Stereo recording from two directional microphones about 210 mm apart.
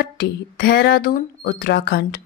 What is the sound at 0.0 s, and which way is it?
A woman's voice, 50° left (ahead or behind).